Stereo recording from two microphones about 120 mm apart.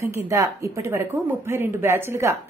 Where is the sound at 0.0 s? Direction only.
25° right (ahead or behind).